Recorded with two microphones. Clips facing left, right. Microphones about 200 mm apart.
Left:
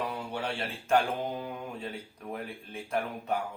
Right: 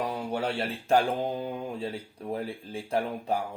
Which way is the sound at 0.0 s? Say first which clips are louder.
Right 4 dB; 40° right (ahead or behind).